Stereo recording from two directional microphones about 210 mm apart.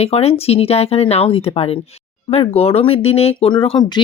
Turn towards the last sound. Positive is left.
turn(degrees=20)  # may be behind; listen again after turning